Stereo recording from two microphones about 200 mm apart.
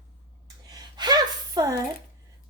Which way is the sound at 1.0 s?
20° right (ahead or behind).